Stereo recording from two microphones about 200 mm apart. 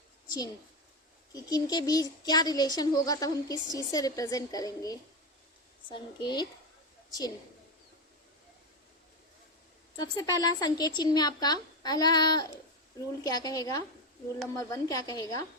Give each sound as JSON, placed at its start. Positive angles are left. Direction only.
{"t": 0.3, "sound": "a woman's voice", "side_deg": 20}
{"t": 10.0, "sound": "a woman's voice", "side_deg": 20}